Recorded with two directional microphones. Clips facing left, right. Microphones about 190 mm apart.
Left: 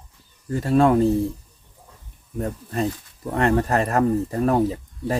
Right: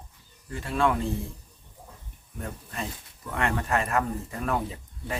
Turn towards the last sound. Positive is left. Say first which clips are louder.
# left 12 dB
turn(degrees=40)  # may be behind; listen again after turning